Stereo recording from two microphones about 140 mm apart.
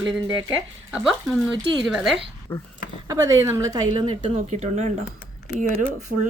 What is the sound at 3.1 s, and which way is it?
Speech, 25° right (ahead or behind).